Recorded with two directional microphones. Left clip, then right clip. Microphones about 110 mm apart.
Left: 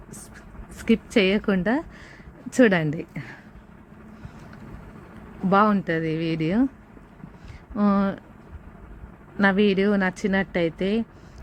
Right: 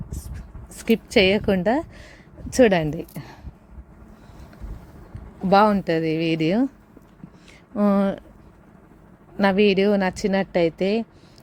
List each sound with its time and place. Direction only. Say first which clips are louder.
0.1 s a sound: even; 40° right (ahead or behind)
2.5 s a woman's voice: right 2 dB; 25° right (ahead or behind)
5.5 s speech: right 3 dB; 50° right (ahead or behind)
7.7 s speech: right 3 dB; 40° right (ahead or behind)
9.4 s a woman's voice: right 2 dB; 40° right (ahead or behind)